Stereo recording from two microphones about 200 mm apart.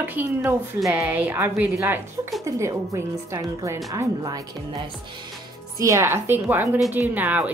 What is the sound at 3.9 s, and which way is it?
Speech, 20° right (ahead or behind).